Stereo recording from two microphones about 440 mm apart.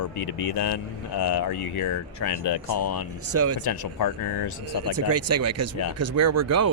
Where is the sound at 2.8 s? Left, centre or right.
Left.